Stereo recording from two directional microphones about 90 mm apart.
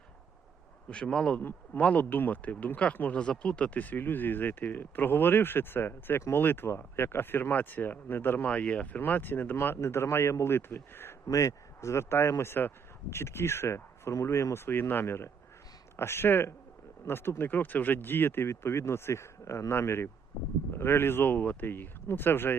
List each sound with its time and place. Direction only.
0.9 s speech: 10° left (ahead or behind)
1.4 s speech: 20° left (ahead or behind)